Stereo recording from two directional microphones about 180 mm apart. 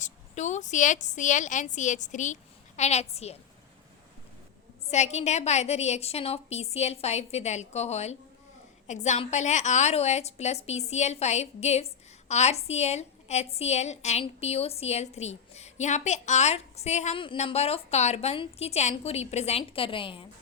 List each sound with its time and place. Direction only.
0.0 s a woman's voice: 40° left (ahead or behind)
4.9 s a woman's voice: 40° left (ahead or behind)